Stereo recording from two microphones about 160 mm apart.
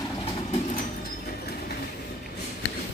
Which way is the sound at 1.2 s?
75° left (ahead or behind).